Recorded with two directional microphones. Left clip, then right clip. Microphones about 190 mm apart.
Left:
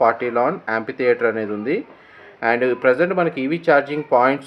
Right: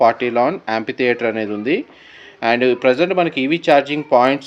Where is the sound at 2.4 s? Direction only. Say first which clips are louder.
Right 2 dB; 30° right (ahead or behind).